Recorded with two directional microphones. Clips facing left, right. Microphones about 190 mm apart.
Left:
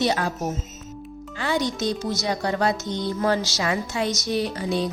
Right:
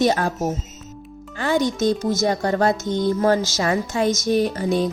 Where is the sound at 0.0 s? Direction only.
45° right (ahead or behind).